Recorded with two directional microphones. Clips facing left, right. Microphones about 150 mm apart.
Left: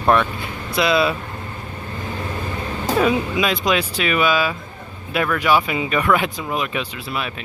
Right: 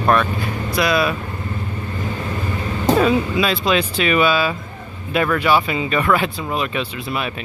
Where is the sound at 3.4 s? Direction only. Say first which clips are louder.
Right 1 dB; 15° left (ahead or behind).